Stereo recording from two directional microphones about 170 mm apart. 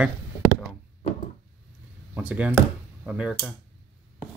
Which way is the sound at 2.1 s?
10° right (ahead or behind).